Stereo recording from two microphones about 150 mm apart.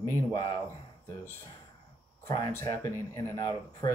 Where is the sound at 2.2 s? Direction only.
20° left (ahead or behind).